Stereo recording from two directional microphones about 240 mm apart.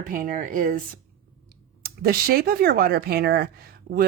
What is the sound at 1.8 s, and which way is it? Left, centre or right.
Speech, right.